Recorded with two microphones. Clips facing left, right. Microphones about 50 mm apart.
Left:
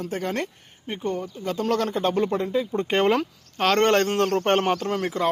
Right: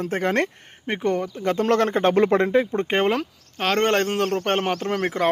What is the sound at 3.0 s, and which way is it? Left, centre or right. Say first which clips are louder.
Speech: left 1 dB; centre.